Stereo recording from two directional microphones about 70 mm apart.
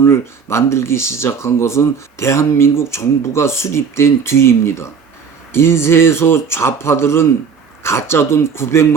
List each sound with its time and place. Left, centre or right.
0.0 s speech: left